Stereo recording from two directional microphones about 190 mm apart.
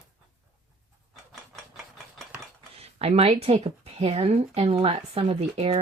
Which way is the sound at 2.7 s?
30° right (ahead or behind).